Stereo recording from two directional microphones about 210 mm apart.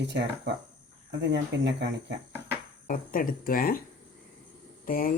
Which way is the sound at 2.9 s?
40° left (ahead or behind).